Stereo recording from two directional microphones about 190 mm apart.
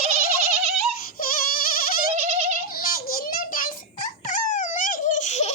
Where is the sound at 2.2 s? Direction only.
35° right (ahead or behind).